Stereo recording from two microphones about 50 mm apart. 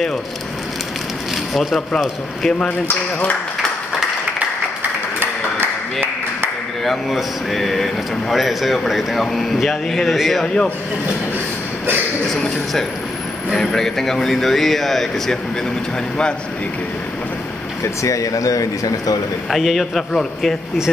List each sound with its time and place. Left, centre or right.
1.5 s speech: centre
6.8 s speech: centre
10.4 s speech: centre
12.3 s speech: centre
17.8 s speech: left
19.5 s speech: centre